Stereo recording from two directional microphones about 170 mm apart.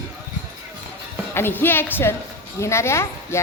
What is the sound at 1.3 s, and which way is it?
A woman's voice, 15° left (ahead or behind).